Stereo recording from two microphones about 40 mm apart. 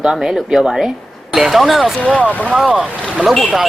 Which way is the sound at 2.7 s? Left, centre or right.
Right.